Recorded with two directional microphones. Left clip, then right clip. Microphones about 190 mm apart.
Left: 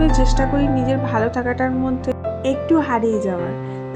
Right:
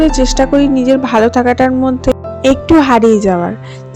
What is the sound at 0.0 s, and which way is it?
Speech, 35° right (ahead or behind).